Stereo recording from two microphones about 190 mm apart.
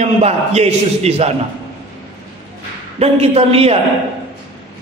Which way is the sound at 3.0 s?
30° right (ahead or behind).